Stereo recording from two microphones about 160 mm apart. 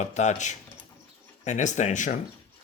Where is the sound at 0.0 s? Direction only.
45° left (ahead or behind).